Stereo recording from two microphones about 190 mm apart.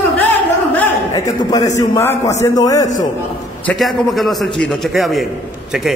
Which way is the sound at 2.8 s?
40° left (ahead or behind).